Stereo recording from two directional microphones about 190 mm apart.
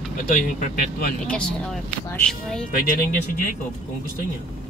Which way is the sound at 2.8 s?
50° left (ahead or behind).